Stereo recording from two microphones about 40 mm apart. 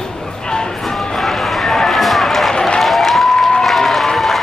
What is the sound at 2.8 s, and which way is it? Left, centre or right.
Applause, centre.